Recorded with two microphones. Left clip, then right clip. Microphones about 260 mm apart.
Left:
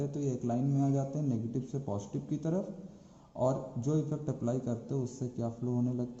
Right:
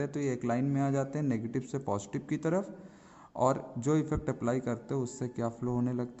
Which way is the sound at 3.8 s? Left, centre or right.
Right.